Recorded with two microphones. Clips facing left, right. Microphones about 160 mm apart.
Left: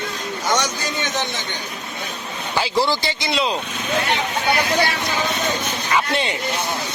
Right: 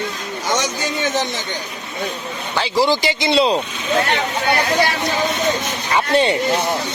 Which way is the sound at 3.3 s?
30° right (ahead or behind).